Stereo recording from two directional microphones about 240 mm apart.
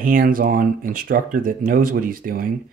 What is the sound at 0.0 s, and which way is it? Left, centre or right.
Speech, right.